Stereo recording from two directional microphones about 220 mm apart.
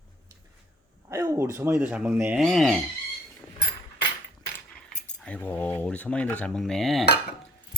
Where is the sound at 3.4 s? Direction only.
5° right (ahead or behind).